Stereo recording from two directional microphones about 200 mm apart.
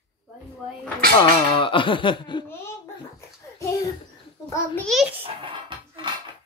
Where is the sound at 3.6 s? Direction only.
15° left (ahead or behind).